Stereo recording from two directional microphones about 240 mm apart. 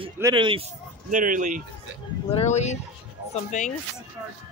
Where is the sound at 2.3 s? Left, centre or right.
Left.